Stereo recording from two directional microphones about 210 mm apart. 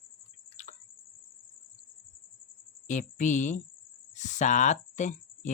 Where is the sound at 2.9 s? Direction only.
35° left (ahead or behind).